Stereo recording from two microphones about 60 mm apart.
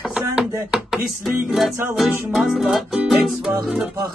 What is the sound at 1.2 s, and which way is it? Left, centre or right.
Music, centre.